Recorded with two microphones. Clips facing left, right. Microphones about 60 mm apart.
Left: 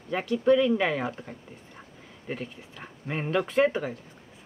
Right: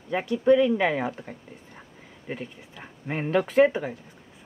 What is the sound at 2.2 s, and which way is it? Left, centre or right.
Speech, centre.